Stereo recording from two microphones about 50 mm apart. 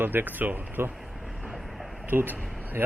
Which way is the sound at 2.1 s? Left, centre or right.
Right.